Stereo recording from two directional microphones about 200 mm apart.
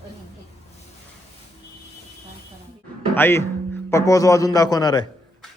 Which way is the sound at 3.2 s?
10° left (ahead or behind).